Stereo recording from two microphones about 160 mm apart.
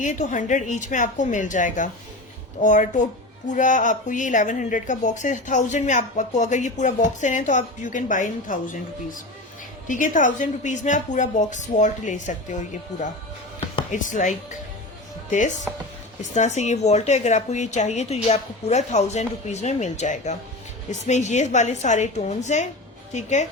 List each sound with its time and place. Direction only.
0.0 s speech: 50° left (ahead or behind)